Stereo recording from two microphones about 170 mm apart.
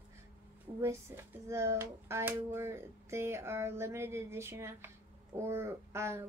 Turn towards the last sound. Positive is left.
turn(degrees=-15)  # may be behind; listen again after turning